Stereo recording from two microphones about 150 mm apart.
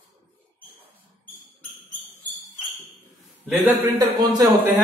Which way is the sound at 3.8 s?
25° right (ahead or behind).